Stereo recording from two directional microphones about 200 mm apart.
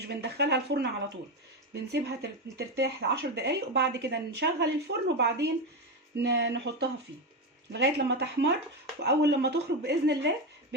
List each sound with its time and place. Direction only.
0.1 s speech: 55° right (ahead or behind)